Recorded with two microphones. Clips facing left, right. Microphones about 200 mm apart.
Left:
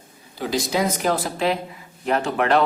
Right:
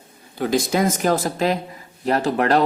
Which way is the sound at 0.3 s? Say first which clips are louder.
Right 3 dB; 50° right (ahead or behind).